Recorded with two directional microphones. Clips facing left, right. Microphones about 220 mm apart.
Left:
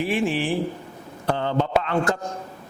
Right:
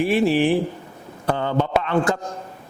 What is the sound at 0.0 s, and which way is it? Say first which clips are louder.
Speech: right 5 dB; 40° right (ahead or behind).